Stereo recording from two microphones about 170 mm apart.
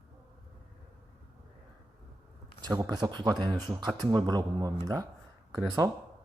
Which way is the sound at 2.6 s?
20° right (ahead or behind).